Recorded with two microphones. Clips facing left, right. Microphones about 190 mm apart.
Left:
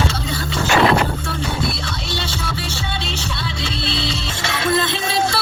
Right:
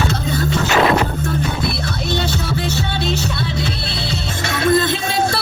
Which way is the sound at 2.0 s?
55° right (ahead or behind).